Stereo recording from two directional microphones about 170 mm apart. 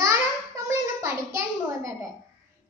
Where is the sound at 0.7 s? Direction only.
15° right (ahead or behind).